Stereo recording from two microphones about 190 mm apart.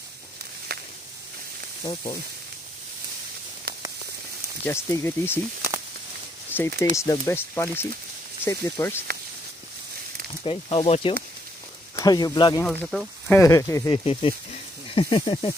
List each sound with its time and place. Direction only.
0.7 s a sound: 55° right (ahead or behind)
3.7 s a sound: 55° right (ahead or behind)
4.6 s speech: 15° left (ahead or behind)
6.5 s speech: 10° left (ahead or behind)
10.4 s speech: 30° left (ahead or behind)
12.6 s speech: centre (ahead or behind)
13.4 s speech: 15° left (ahead or behind)
13.9 s speech: 30° left (ahead or behind)